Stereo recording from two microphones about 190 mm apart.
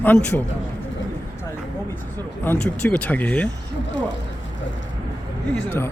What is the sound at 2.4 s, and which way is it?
Speech, 10° left (ahead or behind).